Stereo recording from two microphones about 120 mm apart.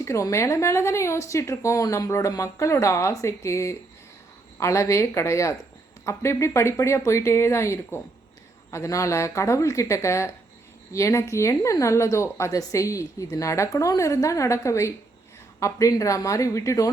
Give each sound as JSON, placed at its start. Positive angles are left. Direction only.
{"t": 0.0, "sound": "speech", "side_deg": 25}